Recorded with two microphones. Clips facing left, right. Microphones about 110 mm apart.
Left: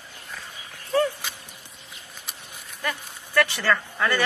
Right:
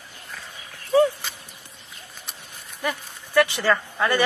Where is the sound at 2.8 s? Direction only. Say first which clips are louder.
Right 3 dB; 15° right (ahead or behind).